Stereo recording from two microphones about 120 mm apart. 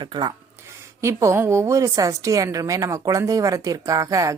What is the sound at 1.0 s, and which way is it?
Speech, 25° right (ahead or behind).